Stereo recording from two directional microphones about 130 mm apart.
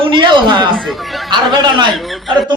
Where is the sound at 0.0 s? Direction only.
40° right (ahead or behind).